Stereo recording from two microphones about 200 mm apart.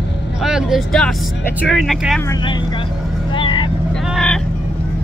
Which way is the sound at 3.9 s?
Centre (ahead or behind).